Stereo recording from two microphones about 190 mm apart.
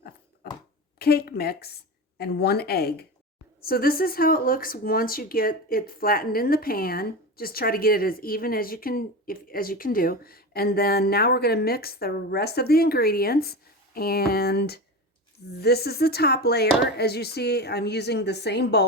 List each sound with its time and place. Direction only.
0.9 s a woman's voice: 55° left (ahead or behind)